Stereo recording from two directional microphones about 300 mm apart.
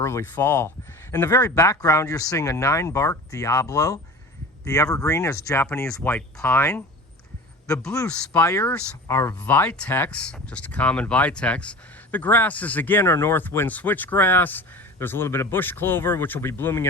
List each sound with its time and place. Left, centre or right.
0.0 s speech: centre